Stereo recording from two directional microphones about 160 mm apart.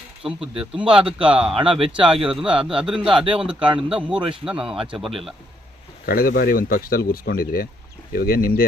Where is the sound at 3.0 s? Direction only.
35° right (ahead or behind).